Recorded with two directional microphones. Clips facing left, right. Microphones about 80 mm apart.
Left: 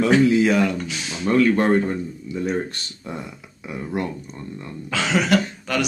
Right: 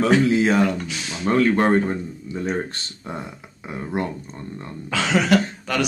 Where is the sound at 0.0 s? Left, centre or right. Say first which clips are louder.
Left 1 dB; right.